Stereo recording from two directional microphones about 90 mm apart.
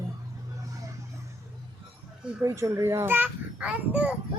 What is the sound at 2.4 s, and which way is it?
A child's voice, 35° right (ahead or behind).